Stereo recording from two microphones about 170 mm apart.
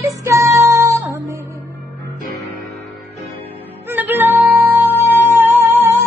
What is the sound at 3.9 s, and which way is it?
Music, 10° right (ahead or behind).